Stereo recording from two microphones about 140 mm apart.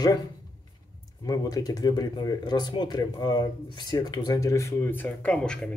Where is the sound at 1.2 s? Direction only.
25° left (ahead or behind).